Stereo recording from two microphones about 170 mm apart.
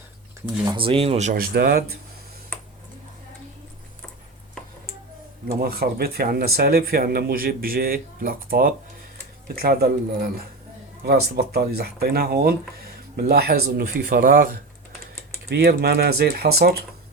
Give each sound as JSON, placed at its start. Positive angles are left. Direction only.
{"t": 0.6, "sound": "speech", "side_deg": -30}
{"t": 1.3, "sound": "speech", "side_deg": -65}
{"t": 5.5, "sound": "speech", "side_deg": -60}
{"t": 15.4, "sound": "speech", "side_deg": -70}